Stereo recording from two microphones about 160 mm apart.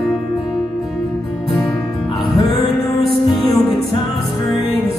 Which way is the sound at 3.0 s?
Centre (ahead or behind).